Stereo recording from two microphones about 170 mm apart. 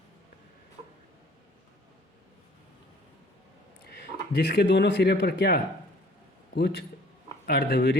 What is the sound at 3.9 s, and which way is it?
Speech, 75° left (ahead or behind).